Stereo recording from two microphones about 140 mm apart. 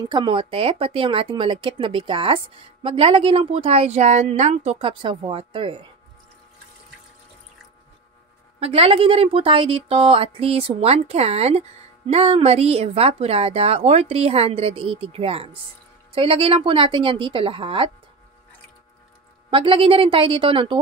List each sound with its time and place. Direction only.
0.0 s speech: 35° right (ahead or behind)
8.5 s a woman's voice: 45° right (ahead or behind)
19.5 s speech: 40° right (ahead or behind)